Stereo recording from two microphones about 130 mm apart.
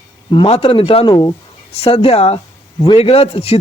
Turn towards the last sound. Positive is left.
turn(degrees=50)  # may be behind; listen again after turning